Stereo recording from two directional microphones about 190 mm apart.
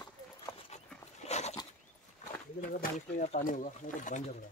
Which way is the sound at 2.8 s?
40° left (ahead or behind).